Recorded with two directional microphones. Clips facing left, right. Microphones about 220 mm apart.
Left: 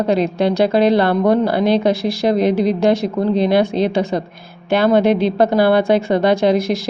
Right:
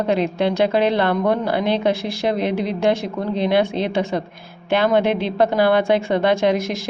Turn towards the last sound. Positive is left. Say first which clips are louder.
# left 4 dB
turn(degrees=35)  # may be behind; listen again after turning